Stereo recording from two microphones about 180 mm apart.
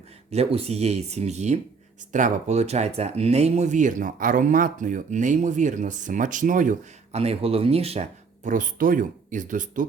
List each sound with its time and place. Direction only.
0.3 s speech: 35° right (ahead or behind)
8.4 s speech: 50° right (ahead or behind)